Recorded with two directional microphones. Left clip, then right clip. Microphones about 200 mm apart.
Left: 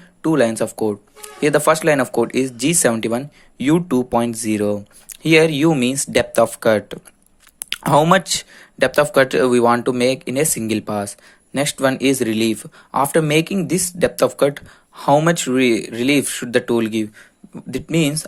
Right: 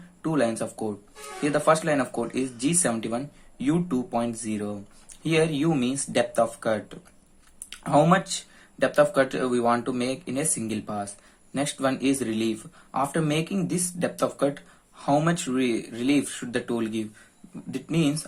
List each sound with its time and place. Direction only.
0.2 s speech: 40° left (ahead or behind)